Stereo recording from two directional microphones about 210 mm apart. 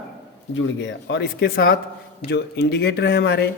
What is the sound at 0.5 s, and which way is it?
Speech, 60° left (ahead or behind).